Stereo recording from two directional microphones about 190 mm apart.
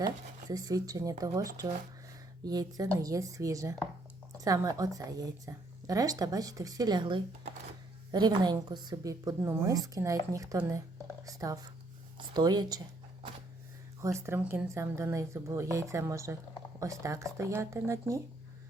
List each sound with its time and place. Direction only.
0.0 s a woman's voice: 20° right (ahead or behind)
14.0 s a woman's voice: 15° right (ahead or behind)